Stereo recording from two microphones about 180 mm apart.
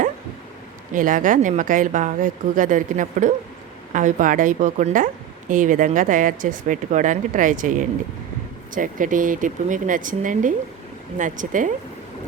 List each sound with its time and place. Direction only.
0.9 s a woman's voice: 50° right (ahead or behind)